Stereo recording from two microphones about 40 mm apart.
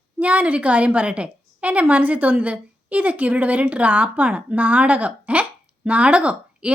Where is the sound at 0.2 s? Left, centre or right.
Right.